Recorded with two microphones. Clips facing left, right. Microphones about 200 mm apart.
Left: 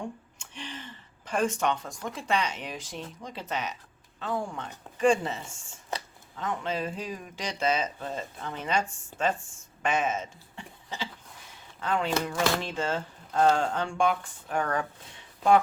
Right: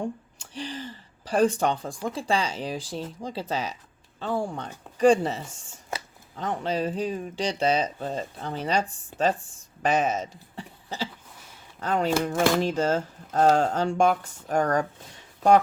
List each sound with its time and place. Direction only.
0.3 s speech: 35° right (ahead or behind)